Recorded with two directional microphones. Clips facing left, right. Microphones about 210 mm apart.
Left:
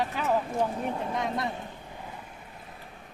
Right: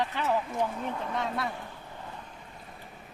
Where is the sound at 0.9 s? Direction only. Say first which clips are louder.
Left 3 dB; 30° left (ahead or behind).